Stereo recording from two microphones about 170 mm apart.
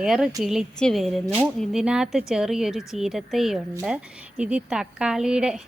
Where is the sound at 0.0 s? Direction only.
5° right (ahead or behind).